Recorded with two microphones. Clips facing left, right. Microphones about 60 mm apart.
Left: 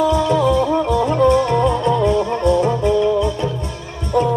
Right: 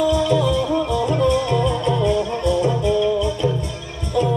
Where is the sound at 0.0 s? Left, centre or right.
Left.